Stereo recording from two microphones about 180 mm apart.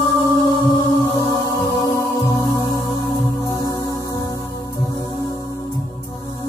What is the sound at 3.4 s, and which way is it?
Music, 20° left (ahead or behind).